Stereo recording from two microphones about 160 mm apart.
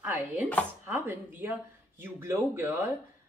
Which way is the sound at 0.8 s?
15° right (ahead or behind).